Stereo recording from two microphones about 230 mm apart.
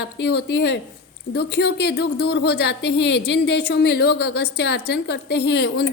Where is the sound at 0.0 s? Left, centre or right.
Left.